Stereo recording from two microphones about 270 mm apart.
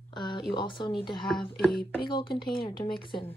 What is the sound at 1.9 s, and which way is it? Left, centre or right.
Speech, centre.